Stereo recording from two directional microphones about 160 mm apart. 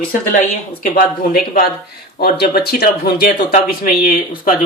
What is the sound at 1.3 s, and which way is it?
Speech, 70° left (ahead or behind).